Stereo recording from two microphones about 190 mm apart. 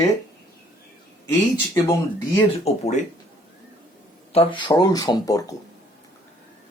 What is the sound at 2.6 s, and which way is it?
Speech, 35° left (ahead or behind).